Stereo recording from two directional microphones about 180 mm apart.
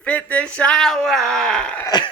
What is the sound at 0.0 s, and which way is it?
Speech, 5° left (ahead or behind).